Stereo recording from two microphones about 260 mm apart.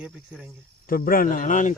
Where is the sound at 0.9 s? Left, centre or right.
Left.